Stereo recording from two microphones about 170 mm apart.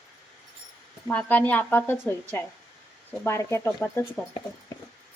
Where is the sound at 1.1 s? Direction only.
10° left (ahead or behind).